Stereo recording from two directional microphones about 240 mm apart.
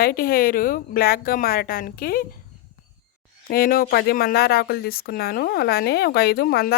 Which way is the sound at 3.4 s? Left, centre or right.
Left.